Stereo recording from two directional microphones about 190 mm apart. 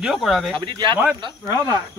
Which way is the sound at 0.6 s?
25° right (ahead or behind).